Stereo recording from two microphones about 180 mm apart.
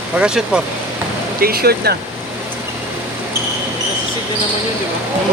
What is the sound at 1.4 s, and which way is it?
Speech, 60° right (ahead or behind).